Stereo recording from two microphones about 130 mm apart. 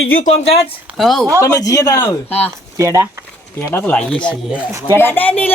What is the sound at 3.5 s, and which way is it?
Speech, 20° left (ahead or behind).